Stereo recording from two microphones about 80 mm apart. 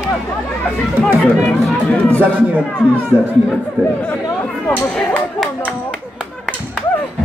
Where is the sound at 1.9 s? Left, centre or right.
Centre.